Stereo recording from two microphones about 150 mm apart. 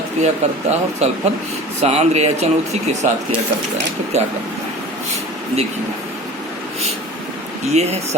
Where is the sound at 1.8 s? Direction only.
45° right (ahead or behind).